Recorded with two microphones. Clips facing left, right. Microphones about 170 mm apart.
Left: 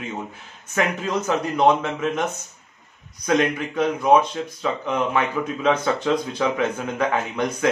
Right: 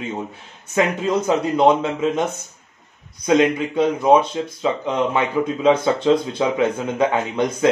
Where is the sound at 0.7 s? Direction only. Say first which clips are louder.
Right 4 dB; 25° right (ahead or behind).